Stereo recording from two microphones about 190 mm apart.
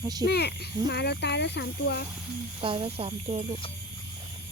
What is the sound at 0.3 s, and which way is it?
Speech, 60° left (ahead or behind).